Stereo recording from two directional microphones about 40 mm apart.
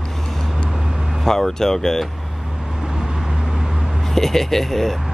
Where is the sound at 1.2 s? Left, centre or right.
Centre.